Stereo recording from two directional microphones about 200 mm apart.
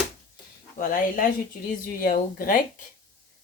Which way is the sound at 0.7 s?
40° left (ahead or behind).